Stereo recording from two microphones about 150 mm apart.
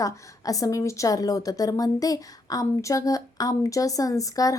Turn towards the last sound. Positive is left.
turn(degrees=20)  # may be behind; listen again after turning